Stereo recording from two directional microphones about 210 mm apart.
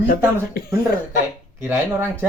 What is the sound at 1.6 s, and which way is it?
Speech, 15° right (ahead or behind).